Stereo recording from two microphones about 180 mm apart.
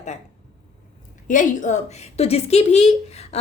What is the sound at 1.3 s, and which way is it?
A woman's voice, 45° left (ahead or behind).